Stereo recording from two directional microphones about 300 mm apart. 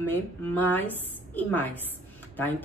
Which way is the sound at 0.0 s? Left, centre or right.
Centre.